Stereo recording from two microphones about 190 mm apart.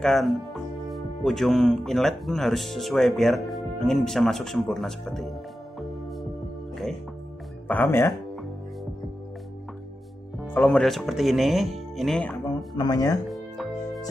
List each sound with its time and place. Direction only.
0.0 s speech: centre (ahead or behind)
7.6 s speech: 10° left (ahead or behind)
10.5 s speech: 5° left (ahead or behind)
12.4 s speech: 20° left (ahead or behind)
13.3 s music: centre (ahead or behind)